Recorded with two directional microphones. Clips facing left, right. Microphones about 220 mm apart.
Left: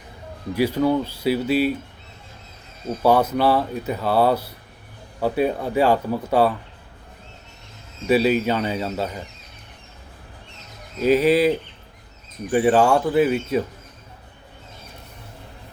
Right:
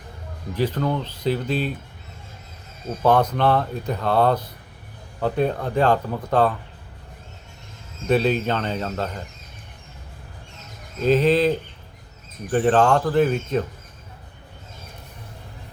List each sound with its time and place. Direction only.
0.5 s speech: 10° left (ahead or behind)
3.0 s speech: 10° left (ahead or behind)
8.0 s speech: 5° left (ahead or behind)
11.0 s speech: 10° left (ahead or behind)